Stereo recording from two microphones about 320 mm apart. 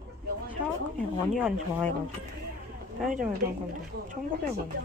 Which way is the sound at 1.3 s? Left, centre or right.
Centre.